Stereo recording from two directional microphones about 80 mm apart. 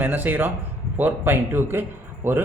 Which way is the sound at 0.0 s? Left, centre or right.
Right.